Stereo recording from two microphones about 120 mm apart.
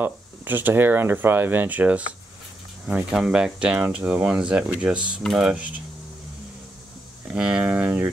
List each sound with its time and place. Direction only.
0.0 s speech: 15° right (ahead or behind)
7.2 s speech: 10° right (ahead or behind)